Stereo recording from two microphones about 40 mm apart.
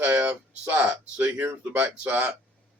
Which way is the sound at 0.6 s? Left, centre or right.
Right.